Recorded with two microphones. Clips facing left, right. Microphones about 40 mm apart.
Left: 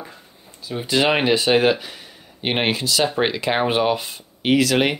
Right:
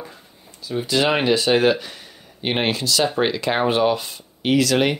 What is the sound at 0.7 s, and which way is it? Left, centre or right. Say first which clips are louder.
Speech: even; centre.